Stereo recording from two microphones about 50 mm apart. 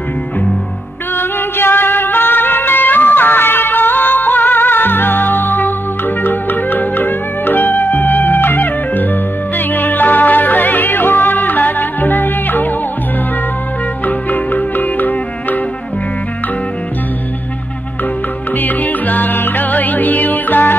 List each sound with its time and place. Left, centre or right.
1.1 s music: left
14.0 s music: left
18.6 s music: left